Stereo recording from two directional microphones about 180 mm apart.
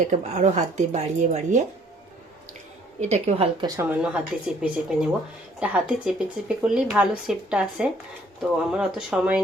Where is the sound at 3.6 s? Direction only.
10° right (ahead or behind).